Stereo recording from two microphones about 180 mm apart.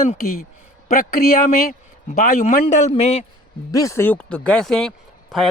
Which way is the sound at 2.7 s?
40° left (ahead or behind).